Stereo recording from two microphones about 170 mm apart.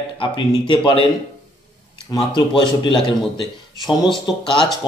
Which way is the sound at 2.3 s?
30° left (ahead or behind).